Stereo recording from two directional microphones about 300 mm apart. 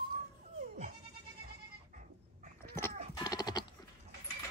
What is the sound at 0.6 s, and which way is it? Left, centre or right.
Goat, right.